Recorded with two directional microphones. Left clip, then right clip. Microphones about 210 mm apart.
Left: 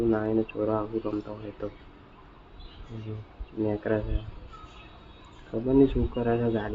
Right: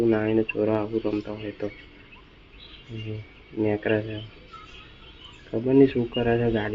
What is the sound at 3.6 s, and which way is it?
Speech, 15° right (ahead or behind).